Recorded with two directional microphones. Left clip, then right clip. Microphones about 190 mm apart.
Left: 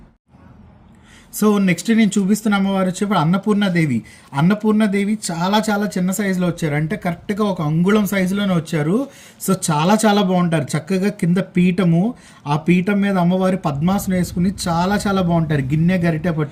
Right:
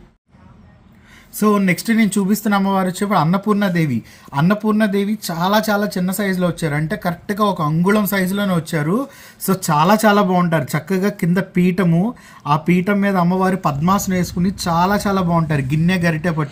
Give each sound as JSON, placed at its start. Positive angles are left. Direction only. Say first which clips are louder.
{"t": 1.4, "sound": "speech", "louder": "right 1 dB", "side_deg": -20}